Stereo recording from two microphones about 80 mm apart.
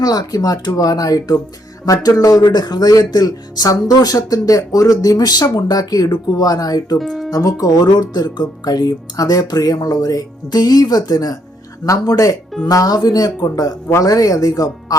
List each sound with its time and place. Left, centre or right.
0.0 s speech: left
7.0 s speech: centre
7.3 s speech: left
7.6 s speech: left